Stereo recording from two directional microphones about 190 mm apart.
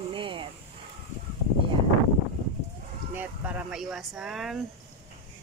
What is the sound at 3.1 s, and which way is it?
Speech, 10° right (ahead or behind).